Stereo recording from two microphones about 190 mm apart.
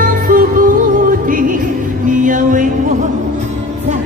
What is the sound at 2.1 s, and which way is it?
Music, 45° right (ahead or behind).